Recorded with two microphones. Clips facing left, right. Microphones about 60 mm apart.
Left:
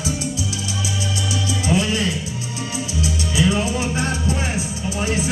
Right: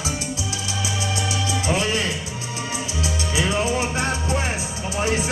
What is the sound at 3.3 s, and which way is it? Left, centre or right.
Music, right.